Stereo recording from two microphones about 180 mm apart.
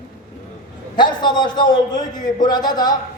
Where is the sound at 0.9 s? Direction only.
25° left (ahead or behind).